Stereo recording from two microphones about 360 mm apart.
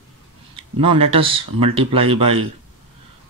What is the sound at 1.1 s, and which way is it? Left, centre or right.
Speech, centre.